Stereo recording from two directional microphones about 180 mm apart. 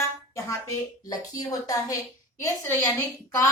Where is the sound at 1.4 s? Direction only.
20° left (ahead or behind).